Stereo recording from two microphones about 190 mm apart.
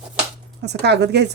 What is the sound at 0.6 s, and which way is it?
Speech, 60° right (ahead or behind).